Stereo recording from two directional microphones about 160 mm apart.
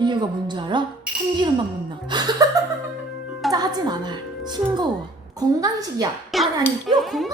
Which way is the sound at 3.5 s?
25° right (ahead or behind).